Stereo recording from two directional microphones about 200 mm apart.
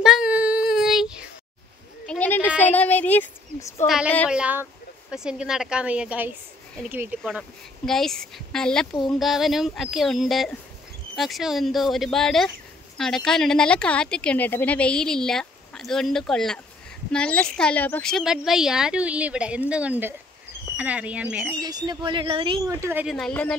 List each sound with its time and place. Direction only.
0.0 s child singing: 5° right (ahead or behind)
2.0 s a sound: 10° left (ahead or behind)
3.8 s speech: centre (ahead or behind)
7.2 s speech: centre (ahead or behind)
21.5 s speech: 20° right (ahead or behind)
23.1 s speech: 5° left (ahead or behind)